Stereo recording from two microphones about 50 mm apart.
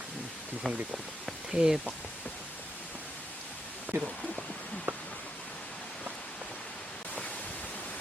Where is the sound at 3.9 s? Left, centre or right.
Right.